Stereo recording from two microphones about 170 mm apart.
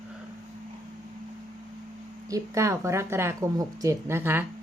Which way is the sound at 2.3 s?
15° right (ahead or behind).